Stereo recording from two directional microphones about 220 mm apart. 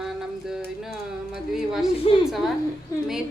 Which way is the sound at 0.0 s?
Centre (ahead or behind).